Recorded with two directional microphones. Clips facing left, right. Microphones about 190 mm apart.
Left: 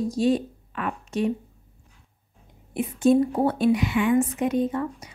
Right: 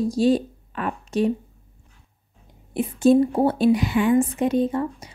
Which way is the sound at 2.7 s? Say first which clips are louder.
Right 3 dB; 30° right (ahead or behind).